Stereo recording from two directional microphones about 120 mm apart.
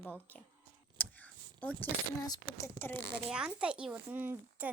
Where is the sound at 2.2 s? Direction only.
30° left (ahead or behind).